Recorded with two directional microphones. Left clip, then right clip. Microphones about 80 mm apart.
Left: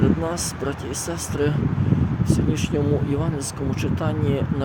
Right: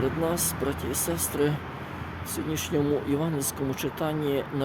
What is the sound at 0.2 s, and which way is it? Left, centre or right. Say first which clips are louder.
Speech: left 2 dB; right.